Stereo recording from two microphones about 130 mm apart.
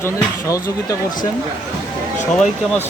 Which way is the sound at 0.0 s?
25° left (ahead or behind).